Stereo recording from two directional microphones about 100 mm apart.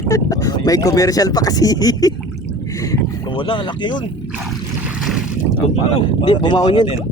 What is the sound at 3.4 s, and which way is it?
Speech, 55° left (ahead or behind).